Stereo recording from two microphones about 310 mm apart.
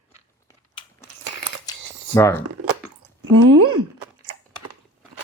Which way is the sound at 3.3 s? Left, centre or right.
Right.